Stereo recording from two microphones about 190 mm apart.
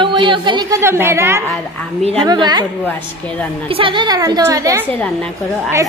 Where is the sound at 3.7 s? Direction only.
25° right (ahead or behind).